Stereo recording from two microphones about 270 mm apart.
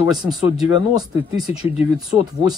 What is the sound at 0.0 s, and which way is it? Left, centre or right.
Speech, centre.